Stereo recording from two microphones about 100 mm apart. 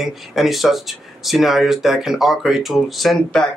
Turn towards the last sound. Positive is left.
turn(degrees=5)  # may be behind; listen again after turning